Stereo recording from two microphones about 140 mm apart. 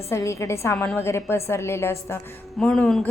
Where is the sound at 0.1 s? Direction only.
20° left (ahead or behind).